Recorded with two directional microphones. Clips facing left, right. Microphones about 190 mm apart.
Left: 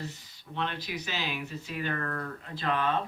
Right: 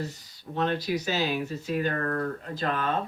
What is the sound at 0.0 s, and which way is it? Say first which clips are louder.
Speech: right 5 dB; 40° right (ahead or behind).